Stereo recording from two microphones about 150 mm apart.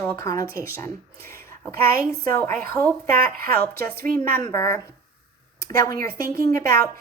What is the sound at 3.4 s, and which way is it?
A woman's voice, 75° right (ahead or behind).